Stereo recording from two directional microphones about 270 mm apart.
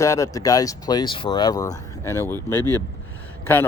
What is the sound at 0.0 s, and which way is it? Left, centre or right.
A man's voice, centre.